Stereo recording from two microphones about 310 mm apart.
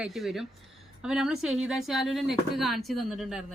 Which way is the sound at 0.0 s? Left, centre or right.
Centre.